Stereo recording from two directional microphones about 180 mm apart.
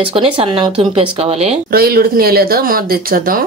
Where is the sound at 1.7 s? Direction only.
55° right (ahead or behind).